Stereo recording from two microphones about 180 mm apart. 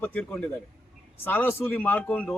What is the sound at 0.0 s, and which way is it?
A man's voice, 10° left (ahead or behind).